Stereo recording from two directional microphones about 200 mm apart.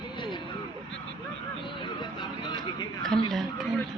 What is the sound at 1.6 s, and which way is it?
Speech, 25° left (ahead or behind).